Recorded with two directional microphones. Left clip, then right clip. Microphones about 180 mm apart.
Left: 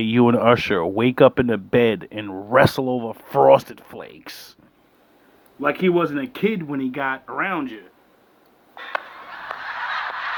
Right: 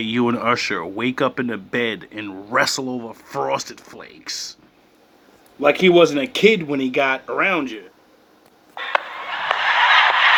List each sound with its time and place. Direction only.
0.0 s speech: 35° left (ahead or behind)
2.8 s speech: 15° left (ahead or behind)
3.1 s speech: 35° left (ahead or behind)
5.8 s speech: 15° left (ahead or behind)
8.7 s a sound: 30° left (ahead or behind)